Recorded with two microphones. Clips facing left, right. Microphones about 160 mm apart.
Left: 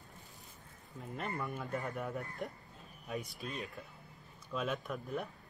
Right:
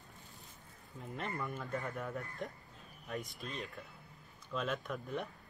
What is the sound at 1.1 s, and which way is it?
Speech, centre (ahead or behind).